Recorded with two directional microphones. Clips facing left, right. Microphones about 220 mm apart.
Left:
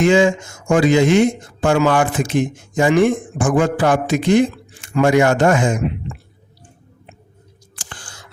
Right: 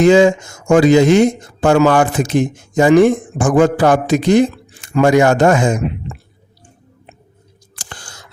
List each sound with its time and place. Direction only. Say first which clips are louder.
0.0 s speech: right 4 dB; 40° right (ahead or behind)
7.8 s whispering: right 2 dB; 40° right (ahead or behind)